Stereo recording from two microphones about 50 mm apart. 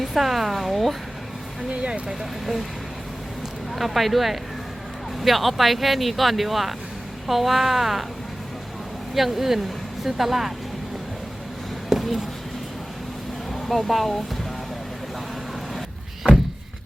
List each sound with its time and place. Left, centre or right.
0.0 s speech: centre
1.7 s speech: right
2.0 s speech: centre
3.7 s speech: centre
9.1 s speech: centre
11.9 s a sound: centre
13.5 s speech: centre